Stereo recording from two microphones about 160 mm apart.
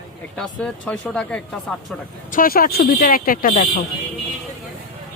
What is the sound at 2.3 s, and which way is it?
Speech, 65° left (ahead or behind).